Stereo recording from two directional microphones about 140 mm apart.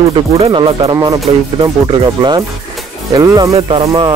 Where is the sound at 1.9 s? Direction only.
30° right (ahead or behind).